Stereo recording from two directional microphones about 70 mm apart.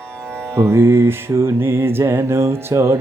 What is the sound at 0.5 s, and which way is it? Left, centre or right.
Music, right.